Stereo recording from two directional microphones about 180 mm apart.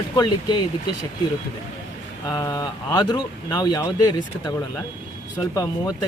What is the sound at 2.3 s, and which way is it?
A man's voice, 20° left (ahead or behind).